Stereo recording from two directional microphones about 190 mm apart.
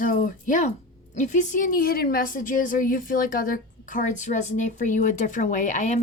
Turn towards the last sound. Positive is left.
turn(degrees=40)  # may be behind; listen again after turning